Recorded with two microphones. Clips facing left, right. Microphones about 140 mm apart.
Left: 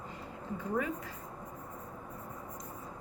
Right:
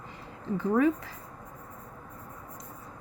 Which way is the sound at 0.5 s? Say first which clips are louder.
Right 9 dB; 90° right.